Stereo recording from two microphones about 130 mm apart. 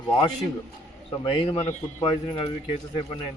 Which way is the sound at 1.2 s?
40° left (ahead or behind).